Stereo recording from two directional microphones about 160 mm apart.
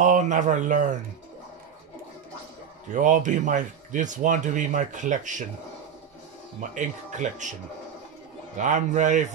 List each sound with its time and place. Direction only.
0.0 s speech: 50° right (ahead or behind)
2.9 s speech: 50° right (ahead or behind)
6.7 s speech: 50° right (ahead or behind)
8.5 s speech: 50° right (ahead or behind)